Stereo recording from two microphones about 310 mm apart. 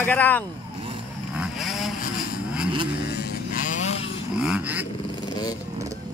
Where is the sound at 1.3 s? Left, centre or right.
Centre.